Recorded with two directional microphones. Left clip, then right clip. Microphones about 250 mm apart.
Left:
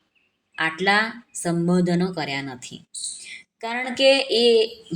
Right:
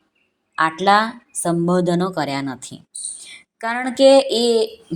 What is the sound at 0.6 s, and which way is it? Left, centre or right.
Speech, centre.